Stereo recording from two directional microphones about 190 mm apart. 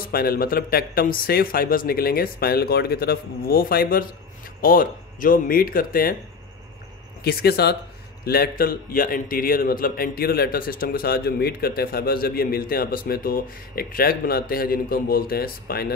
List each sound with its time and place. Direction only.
0.1 s a man's voice: 50° left (ahead or behind)
7.2 s a man's voice: 55° left (ahead or behind)